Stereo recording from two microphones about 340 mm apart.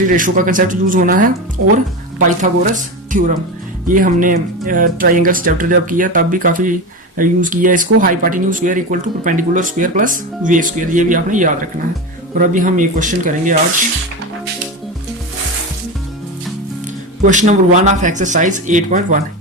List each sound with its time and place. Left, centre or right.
0.1 s speech: right
17.2 s speech: right